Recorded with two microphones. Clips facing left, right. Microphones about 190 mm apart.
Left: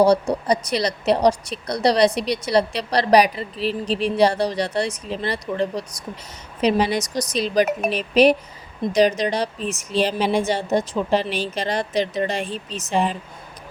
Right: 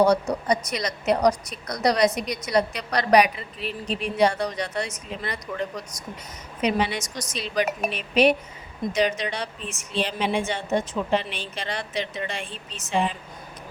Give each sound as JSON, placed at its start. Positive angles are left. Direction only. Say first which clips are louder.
{"t": 0.0, "sound": "a woman's voice", "louder": "left 3 dB", "side_deg": 35}